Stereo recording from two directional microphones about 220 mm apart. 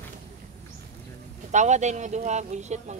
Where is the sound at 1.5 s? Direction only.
30° right (ahead or behind).